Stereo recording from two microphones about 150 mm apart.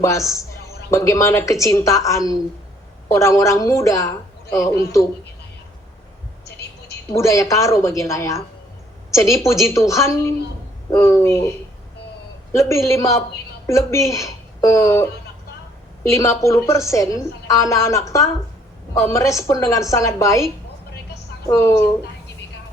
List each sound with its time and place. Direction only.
0.0 s a woman's voice: 20° left (ahead or behind)
7.1 s a woman's voice: 20° left (ahead or behind)
12.5 s a woman's voice: 20° left (ahead or behind)
19.0 s a woman's voice: 20° left (ahead or behind)
21.4 s a woman's voice: 20° left (ahead or behind)